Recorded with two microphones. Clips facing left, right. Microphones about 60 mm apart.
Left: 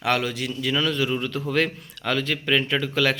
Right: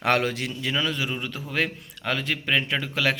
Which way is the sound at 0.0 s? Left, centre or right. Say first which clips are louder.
Right 1 dB; right.